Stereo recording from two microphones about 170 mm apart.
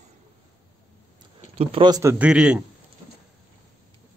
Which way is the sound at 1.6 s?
35° right (ahead or behind).